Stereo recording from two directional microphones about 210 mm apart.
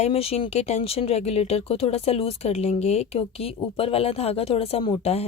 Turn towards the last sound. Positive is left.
turn(degrees=25)  # may be behind; listen again after turning